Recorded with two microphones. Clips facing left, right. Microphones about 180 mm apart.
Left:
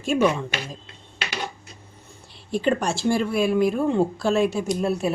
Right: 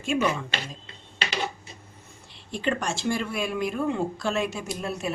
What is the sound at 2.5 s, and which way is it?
Speech, 35° left (ahead or behind).